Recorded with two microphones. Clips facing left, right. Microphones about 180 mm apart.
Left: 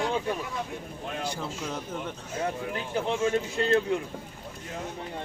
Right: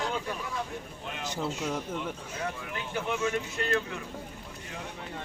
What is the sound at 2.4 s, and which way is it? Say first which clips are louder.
Speech: left 7 dB; 30° left (ahead or behind).